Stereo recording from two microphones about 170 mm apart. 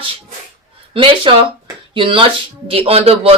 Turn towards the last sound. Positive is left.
turn(degrees=-35)  # may be behind; listen again after turning